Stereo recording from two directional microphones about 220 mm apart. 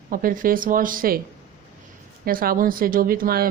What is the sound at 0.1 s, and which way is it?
A woman's voice, 40° right (ahead or behind).